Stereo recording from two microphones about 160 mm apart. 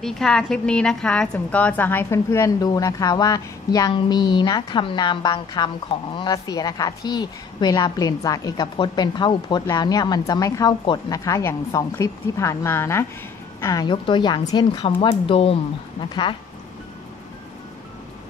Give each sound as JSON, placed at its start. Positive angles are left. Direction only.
{"t": 0.0, "sound": "a woman's voice", "side_deg": 5}